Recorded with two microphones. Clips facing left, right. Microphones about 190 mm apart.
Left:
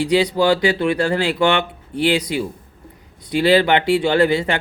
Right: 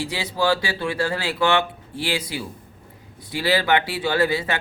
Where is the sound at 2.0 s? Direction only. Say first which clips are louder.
Left 8 dB; 20° left (ahead or behind).